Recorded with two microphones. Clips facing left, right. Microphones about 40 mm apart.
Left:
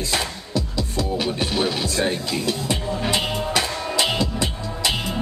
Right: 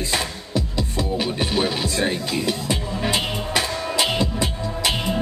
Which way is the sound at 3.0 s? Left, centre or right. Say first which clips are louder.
Even; right.